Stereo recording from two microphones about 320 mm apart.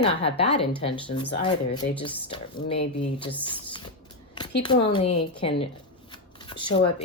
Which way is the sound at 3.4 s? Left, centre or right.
Centre.